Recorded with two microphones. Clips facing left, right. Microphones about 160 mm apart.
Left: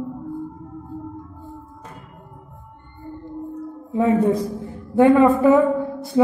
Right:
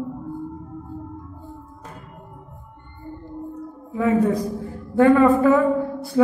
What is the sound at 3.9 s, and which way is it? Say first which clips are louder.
A man's voice: left 2 dB; 25° left (ahead or behind).